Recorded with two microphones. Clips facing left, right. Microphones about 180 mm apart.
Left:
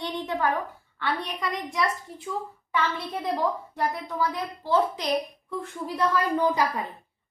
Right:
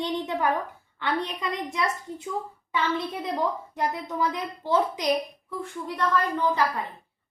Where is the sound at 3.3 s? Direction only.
20° right (ahead or behind).